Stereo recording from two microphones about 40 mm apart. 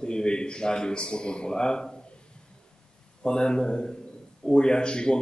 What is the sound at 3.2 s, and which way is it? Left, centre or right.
A man's voice, left.